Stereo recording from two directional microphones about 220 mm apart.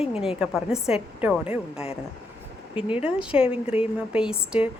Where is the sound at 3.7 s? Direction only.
5° right (ahead or behind).